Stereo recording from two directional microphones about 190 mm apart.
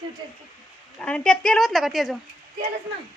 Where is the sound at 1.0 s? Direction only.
5° left (ahead or behind).